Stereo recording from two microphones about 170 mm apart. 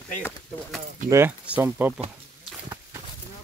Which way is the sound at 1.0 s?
15° right (ahead or behind).